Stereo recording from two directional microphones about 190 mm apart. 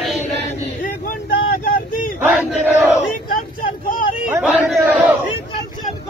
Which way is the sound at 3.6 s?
45° left (ahead or behind).